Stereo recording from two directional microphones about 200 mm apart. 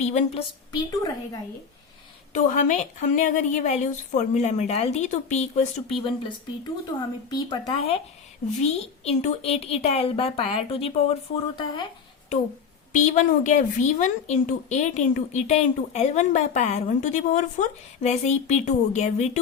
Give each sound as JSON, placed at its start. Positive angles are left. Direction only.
{"t": 0.0, "sound": "a woman's voice", "side_deg": 35}
{"t": 0.7, "sound": "speech", "side_deg": 20}
{"t": 2.3, "sound": "a woman's voice", "side_deg": 35}
{"t": 12.9, "sound": "a woman's voice", "side_deg": 40}